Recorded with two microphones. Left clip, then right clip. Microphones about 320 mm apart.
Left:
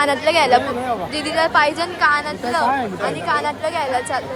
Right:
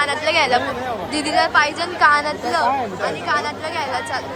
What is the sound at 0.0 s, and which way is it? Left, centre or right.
Speech, centre.